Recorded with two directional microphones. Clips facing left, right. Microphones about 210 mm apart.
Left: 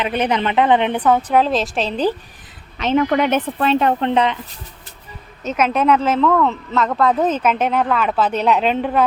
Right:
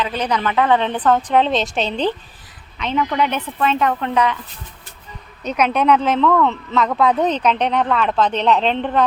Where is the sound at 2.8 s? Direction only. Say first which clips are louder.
Left 4 dB; 45° left (ahead or behind); by 4.3 s 25° left (ahead or behind).